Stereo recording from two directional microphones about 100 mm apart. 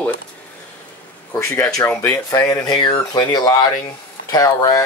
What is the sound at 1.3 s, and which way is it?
Speech, 25° left (ahead or behind).